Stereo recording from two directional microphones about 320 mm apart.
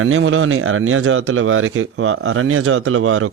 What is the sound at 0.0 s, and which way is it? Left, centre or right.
Speech, right.